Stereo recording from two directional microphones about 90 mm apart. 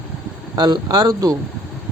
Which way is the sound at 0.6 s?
50° right (ahead or behind).